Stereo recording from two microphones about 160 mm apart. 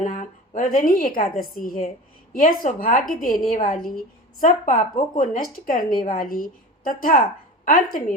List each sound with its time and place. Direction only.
0.0 s a woman's voice: 50° left (ahead or behind)